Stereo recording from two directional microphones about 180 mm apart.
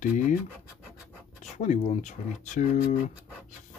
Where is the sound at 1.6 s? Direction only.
40° left (ahead or behind).